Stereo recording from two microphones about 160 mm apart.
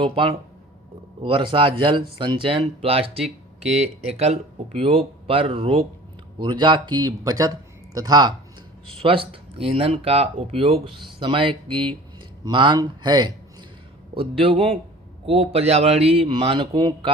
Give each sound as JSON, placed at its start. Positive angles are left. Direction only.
{"t": 0.0, "sound": "speech", "side_deg": -35}